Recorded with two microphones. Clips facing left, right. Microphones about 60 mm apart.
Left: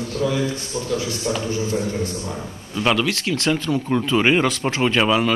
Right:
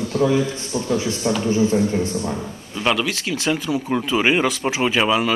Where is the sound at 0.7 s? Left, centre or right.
Right.